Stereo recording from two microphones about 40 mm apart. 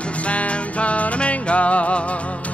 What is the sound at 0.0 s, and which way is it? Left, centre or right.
Music, left.